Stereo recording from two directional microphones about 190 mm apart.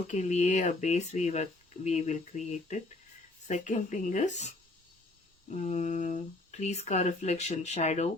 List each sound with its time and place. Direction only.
0.1 s speech: 40° left (ahead or behind)